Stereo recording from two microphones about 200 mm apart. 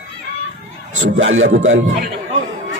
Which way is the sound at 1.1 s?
80° right.